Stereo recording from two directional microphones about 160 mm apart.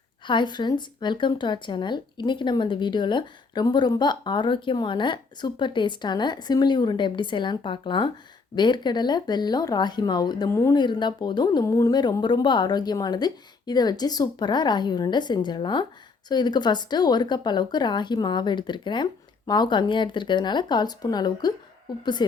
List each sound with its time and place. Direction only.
0.3 s speech: 30° left (ahead or behind)